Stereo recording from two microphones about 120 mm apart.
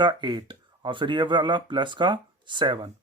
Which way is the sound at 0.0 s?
40° right (ahead or behind).